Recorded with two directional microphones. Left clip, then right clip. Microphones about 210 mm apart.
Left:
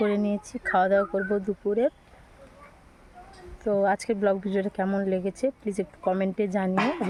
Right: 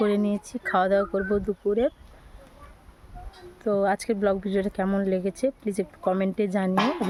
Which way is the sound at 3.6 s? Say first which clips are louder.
Even; 10° right (ahead or behind).